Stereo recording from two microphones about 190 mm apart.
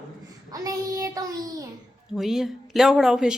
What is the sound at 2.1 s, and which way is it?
Speech, centre (ahead or behind).